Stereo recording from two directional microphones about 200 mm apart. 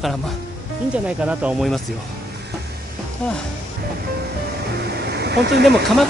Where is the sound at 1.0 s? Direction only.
5° right (ahead or behind).